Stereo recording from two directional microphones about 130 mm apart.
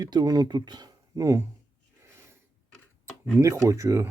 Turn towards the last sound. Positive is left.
turn(degrees=-25)  # may be behind; listen again after turning